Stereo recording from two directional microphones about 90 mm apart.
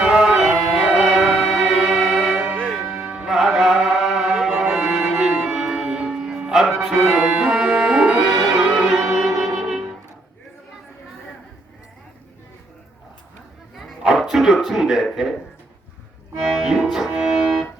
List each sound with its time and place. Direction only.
0.0 s music: 5° right (ahead or behind)
2.6 s music: 10° left (ahead or behind)
2.8 s music: 15° right (ahead or behind)
3.3 s music: 5° right (ahead or behind)
4.8 s music: 15° right (ahead or behind)
5.5 s music: 5° right (ahead or behind)
13.7 s a sound: centre (ahead or behind)
16.4 s music: 5° right (ahead or behind)